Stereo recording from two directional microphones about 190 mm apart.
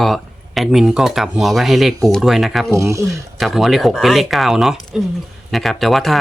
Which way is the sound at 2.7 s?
15° right (ahead or behind).